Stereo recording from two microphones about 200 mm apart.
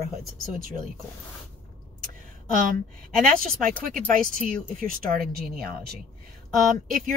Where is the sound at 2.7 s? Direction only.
45° right (ahead or behind).